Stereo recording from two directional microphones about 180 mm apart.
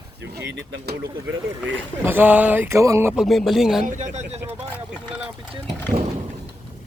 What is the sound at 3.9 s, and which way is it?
Speech, 45° right (ahead or behind).